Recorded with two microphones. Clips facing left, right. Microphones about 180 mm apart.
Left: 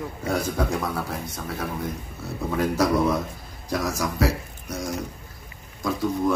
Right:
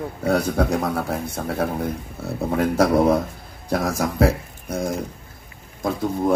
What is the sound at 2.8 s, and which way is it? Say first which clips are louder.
A man's voice: right 6 dB; 55° right (ahead or behind).